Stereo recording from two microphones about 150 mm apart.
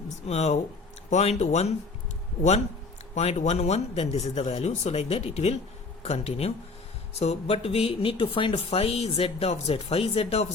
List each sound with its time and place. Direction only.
0.1 s speech: 45° left (ahead or behind)
3.2 s speech: 45° left (ahead or behind)